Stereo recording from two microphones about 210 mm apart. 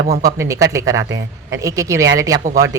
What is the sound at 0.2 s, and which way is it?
A woman's voice, 15° right (ahead or behind).